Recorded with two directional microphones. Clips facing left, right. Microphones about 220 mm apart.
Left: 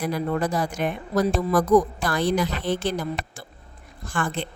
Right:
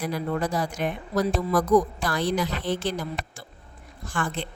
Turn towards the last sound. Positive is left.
turn(degrees=55)  # may be behind; listen again after turning